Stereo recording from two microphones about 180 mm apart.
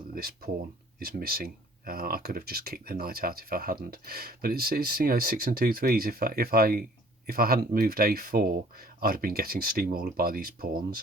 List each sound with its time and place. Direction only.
0.1 s speech: 55° right (ahead or behind)